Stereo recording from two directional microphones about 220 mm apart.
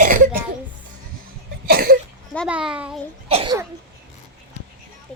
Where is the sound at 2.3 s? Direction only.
Centre (ahead or behind).